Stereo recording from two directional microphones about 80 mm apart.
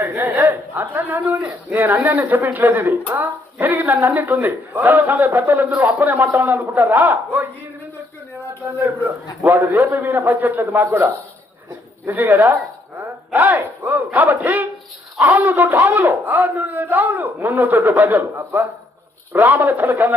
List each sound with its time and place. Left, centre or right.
0.0 s speech: right
8.8 s speech: right
19.3 s speech: right